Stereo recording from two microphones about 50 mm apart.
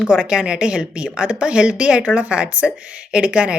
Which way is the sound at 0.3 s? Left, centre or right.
Centre.